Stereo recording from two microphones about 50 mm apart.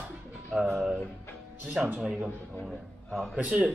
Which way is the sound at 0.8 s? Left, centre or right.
Centre.